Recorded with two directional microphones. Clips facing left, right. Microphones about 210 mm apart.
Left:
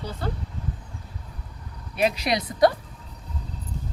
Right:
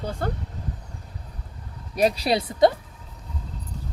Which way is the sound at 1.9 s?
35° right (ahead or behind).